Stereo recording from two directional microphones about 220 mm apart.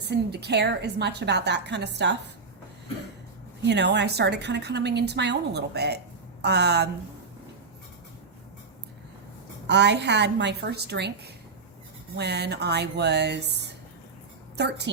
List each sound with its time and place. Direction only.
0.0 s a woman's voice: 50° right (ahead or behind)
3.6 s a woman's voice: 50° right (ahead or behind)
9.6 s a woman's voice: 50° right (ahead or behind)
12.1 s a woman's voice: 50° right (ahead or behind)